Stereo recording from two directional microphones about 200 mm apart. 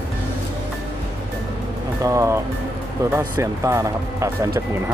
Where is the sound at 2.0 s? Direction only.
15° right (ahead or behind).